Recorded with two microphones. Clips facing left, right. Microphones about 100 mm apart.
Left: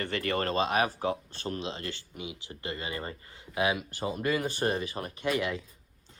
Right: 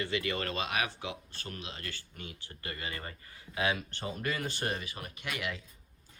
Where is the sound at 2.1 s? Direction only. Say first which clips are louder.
Left 6 dB; 10° left (ahead or behind).